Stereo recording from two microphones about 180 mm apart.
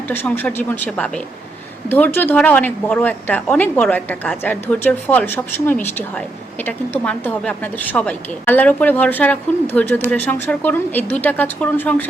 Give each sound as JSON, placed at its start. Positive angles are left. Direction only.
{"t": 0.1, "sound": "a woman's voice", "side_deg": 10}